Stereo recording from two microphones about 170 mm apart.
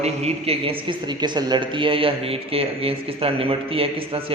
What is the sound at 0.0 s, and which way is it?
A man's voice, 40° right (ahead or behind).